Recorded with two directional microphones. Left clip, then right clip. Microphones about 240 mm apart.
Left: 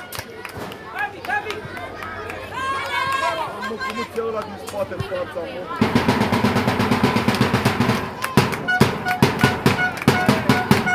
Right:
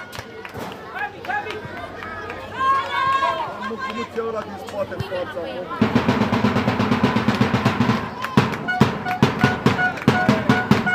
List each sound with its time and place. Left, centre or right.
2.6 s run: left
5.8 s drum: left